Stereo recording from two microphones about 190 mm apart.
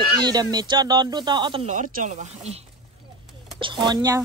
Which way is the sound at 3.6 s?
25° right (ahead or behind).